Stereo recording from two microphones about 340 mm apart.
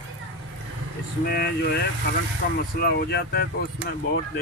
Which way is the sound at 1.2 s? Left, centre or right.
Left.